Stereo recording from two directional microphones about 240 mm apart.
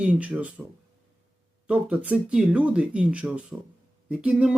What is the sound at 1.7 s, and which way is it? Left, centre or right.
Speech, centre.